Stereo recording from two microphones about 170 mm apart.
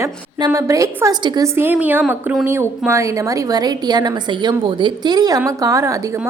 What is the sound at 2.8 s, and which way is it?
A woman's voice, 15° right (ahead or behind).